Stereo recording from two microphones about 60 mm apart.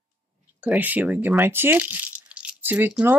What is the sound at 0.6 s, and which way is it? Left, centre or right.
Speech, right.